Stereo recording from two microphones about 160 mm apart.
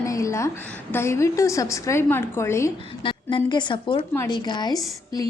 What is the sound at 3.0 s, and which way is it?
A woman's voice, 30° left (ahead or behind).